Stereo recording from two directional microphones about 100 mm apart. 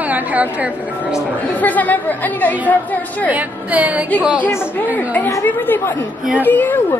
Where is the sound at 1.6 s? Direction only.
15° left (ahead or behind).